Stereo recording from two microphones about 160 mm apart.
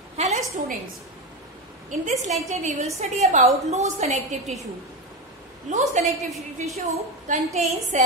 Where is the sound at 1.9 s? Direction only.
50° right (ahead or behind).